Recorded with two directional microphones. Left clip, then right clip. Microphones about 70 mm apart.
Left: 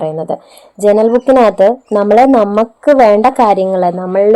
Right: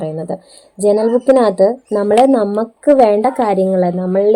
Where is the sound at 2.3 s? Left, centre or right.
Left.